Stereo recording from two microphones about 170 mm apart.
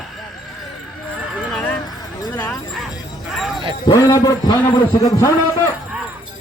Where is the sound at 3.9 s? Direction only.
20° left (ahead or behind).